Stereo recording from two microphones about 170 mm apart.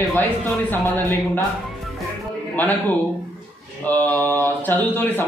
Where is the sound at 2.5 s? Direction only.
10° left (ahead or behind).